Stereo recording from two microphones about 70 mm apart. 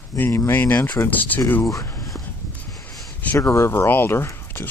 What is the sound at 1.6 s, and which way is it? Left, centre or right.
Speech, left.